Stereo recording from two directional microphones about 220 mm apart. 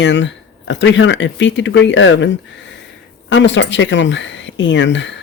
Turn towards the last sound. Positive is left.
turn(degrees=55)  # may be behind; listen again after turning